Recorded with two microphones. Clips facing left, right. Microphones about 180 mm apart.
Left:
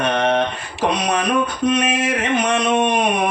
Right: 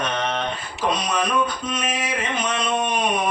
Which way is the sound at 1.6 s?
75° left (ahead or behind).